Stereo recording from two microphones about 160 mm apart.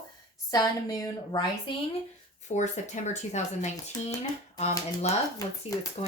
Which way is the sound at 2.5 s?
50° left (ahead or behind).